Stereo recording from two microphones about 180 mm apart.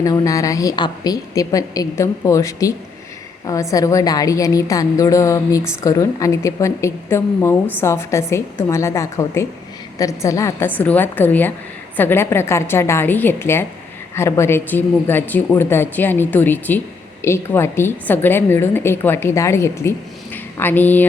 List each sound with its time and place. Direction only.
0.0 s a woman's voice: 20° left (ahead or behind)